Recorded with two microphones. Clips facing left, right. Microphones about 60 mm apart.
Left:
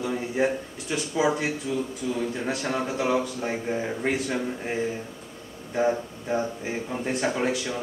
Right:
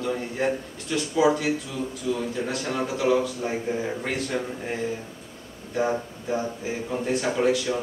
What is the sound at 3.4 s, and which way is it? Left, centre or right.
Speech, centre.